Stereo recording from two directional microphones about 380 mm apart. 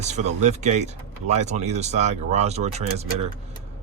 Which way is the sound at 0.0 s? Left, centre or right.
Centre.